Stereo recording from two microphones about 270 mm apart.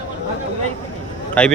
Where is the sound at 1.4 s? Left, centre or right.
Centre.